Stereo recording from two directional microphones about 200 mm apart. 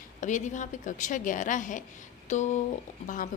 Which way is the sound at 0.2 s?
40° left (ahead or behind).